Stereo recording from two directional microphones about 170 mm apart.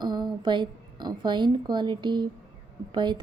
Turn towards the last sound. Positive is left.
turn(degrees=-25)  # may be behind; listen again after turning